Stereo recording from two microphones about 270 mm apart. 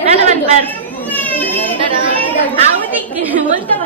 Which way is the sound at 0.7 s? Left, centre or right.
Centre.